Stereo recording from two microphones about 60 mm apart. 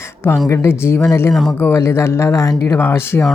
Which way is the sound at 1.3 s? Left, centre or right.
Centre.